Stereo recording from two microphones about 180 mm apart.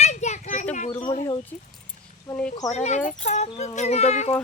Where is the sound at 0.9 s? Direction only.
30° left (ahead or behind).